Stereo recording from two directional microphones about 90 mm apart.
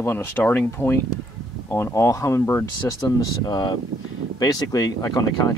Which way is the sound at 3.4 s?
50° left (ahead or behind).